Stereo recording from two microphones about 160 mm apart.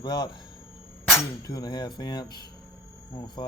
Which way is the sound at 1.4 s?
25° left (ahead or behind).